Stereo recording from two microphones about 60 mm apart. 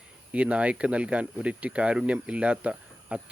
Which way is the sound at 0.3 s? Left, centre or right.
Right.